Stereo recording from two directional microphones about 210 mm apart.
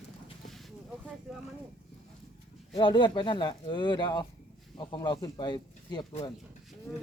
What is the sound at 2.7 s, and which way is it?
Speech, 20° left (ahead or behind).